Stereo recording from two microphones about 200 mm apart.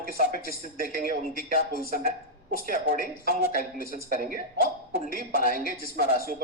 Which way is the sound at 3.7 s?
45° left (ahead or behind).